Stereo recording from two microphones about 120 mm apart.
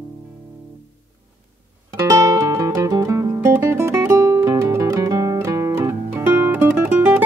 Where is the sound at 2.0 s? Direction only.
30° right (ahead or behind).